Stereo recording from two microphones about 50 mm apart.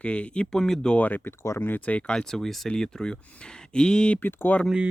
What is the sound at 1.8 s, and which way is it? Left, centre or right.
Speech, left.